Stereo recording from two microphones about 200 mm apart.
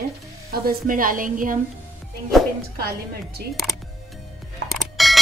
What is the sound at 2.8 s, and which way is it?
Speech, 50° right (ahead or behind).